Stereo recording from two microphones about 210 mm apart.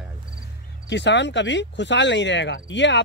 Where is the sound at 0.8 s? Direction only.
55° left (ahead or behind).